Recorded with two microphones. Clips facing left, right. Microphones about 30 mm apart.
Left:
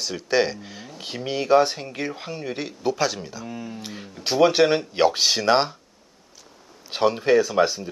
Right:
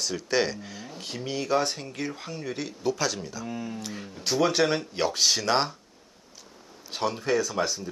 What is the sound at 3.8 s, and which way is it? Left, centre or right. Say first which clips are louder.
Speech: left 2 dB; centre.